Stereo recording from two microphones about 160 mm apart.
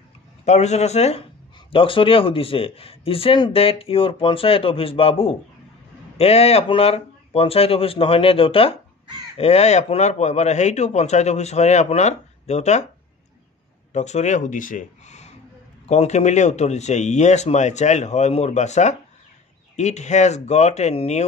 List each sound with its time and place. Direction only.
0.5 s speech: 45° left (ahead or behind)
13.9 s speech: 45° left (ahead or behind)